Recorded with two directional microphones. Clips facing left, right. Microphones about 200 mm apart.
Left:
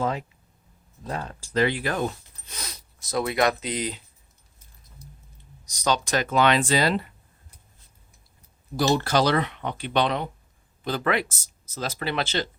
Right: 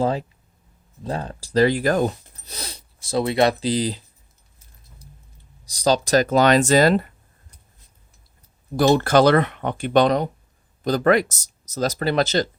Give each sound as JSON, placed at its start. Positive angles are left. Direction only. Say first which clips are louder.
{"t": 0.0, "sound": "a sound", "louder": "right 5 dB", "side_deg": -35}
{"t": 1.0, "sound": "speech", "louder": "right 5 dB", "side_deg": -30}
{"t": 5.6, "sound": "speech", "louder": "right 6 dB", "side_deg": -30}
{"t": 8.7, "sound": "speech", "louder": "right 6 dB", "side_deg": -55}